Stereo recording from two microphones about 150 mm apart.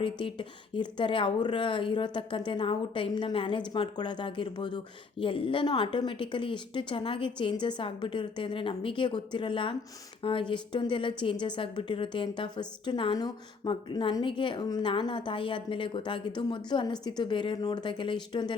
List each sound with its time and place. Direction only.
0.0 s a woman's voice: 35° left (ahead or behind)